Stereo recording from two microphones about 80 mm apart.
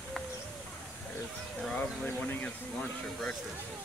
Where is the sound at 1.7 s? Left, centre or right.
Centre.